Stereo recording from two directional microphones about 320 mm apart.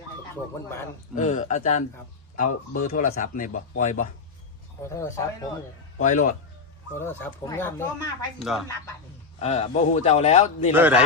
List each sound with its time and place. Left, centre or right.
1.1 s a man's voice: left
4.8 s speech: centre
6.0 s a man's voice: left
6.9 s speech: centre
9.4 s a man's voice: centre
10.7 s a man's voice: centre